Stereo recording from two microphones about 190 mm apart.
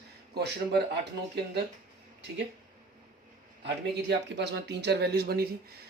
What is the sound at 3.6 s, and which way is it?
Speech, 65° right (ahead or behind).